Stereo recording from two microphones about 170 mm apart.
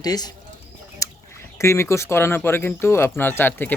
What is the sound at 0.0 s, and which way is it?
Speech, 25° left (ahead or behind).